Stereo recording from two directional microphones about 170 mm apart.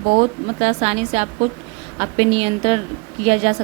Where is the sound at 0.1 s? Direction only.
40° right (ahead or behind).